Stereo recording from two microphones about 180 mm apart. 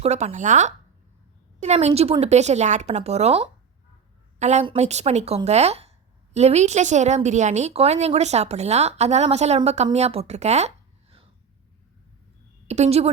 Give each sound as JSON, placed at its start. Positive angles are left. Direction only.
{"t": 0.0, "sound": "a woman's voice", "side_deg": -35}
{"t": 12.6, "sound": "a woman's voice", "side_deg": -35}